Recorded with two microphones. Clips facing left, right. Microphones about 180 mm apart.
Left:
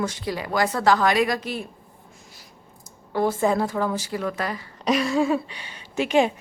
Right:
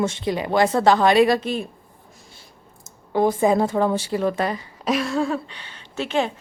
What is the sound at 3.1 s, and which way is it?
Speech, 15° right (ahead or behind).